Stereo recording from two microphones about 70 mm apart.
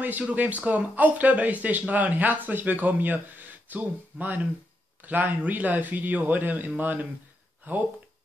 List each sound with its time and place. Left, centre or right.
0.3 s speech: right